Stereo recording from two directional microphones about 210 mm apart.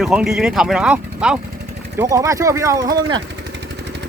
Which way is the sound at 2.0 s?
15° right (ahead or behind).